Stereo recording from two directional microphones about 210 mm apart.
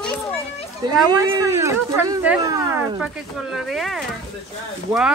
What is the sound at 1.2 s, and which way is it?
Speech, 15° right (ahead or behind).